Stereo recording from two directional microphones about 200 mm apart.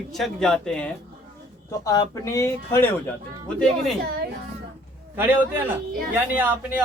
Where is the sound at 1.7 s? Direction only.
15° left (ahead or behind).